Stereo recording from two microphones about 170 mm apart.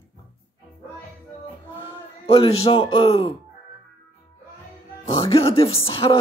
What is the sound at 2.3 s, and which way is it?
Speech, 35° left (ahead or behind).